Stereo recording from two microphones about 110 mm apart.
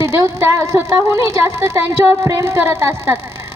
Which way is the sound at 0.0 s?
25° right (ahead or behind).